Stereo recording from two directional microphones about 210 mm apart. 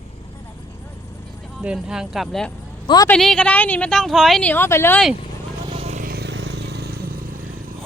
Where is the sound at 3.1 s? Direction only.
5° left (ahead or behind).